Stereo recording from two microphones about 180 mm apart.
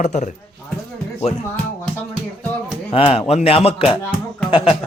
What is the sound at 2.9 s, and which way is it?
A man's voice, 30° left (ahead or behind).